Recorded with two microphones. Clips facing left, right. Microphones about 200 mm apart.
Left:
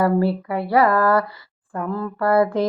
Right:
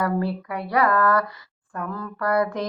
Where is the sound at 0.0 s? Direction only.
30° left (ahead or behind).